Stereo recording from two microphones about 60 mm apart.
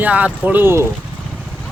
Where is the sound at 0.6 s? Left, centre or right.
Right.